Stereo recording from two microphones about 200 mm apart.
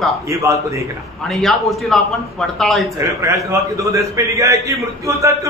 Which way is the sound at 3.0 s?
15° right (ahead or behind).